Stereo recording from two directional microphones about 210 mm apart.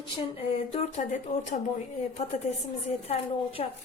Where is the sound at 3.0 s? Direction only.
30° left (ahead or behind).